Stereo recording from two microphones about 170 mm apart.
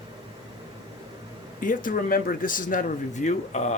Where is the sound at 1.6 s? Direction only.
55° left (ahead or behind).